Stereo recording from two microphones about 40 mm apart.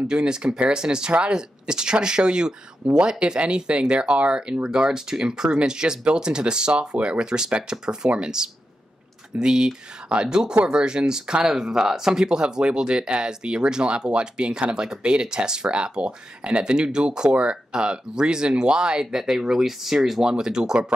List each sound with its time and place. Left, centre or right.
0.1 s speech: right